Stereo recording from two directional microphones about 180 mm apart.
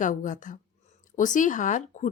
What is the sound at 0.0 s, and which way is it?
A woman's voice, 45° left (ahead or behind).